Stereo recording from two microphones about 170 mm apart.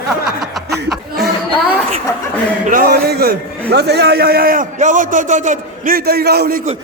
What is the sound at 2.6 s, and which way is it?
A man's voice, 55° right (ahead or behind).